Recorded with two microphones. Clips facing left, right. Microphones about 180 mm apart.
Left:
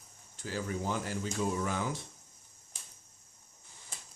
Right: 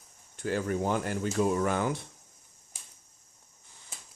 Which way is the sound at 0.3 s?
60° right (ahead or behind).